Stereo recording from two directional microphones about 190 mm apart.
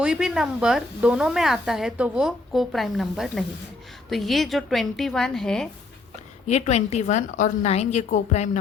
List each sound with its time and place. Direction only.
0.0 s speech: 5° right (ahead or behind)
6.5 s a woman's voice: 35° left (ahead or behind)